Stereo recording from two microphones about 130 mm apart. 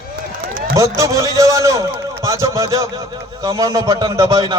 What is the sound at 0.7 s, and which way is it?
A man's voice, 25° right (ahead or behind).